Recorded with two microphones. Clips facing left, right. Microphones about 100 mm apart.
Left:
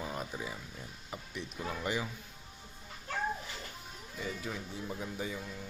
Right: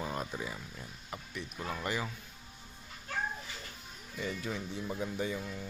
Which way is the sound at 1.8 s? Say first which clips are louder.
Left 1 dB; 10° left (ahead or behind).